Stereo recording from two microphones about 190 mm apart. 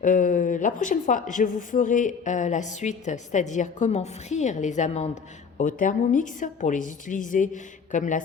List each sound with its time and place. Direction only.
0.0 s a woman's voice: 45° left (ahead or behind)